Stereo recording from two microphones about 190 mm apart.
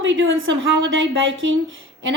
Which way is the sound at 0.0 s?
80° right.